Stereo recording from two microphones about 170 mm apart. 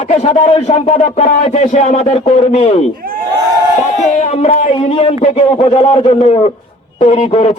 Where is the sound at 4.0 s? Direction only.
45° left (ahead or behind).